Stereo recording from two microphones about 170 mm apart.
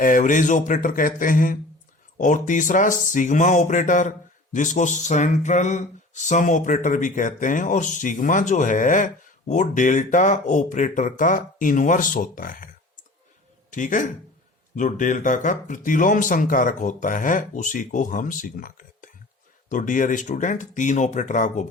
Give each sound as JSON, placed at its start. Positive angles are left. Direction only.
{"t": 0.0, "sound": "speech", "side_deg": 50}
{"t": 13.7, "sound": "speech", "side_deg": 50}